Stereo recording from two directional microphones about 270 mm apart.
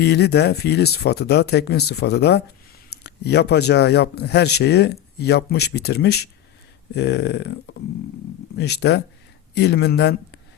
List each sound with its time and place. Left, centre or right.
0.0 s speech: left